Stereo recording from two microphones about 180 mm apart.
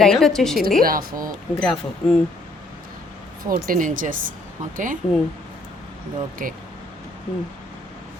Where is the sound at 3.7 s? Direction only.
45° right (ahead or behind).